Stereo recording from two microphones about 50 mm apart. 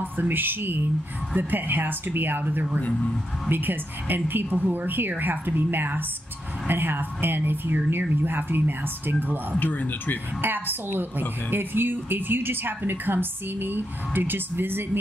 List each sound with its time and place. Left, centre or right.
0.0 s a woman's voice: right
2.9 s speech: centre
3.4 s a woman's voice: right
9.6 s speech: left
10.4 s a woman's voice: right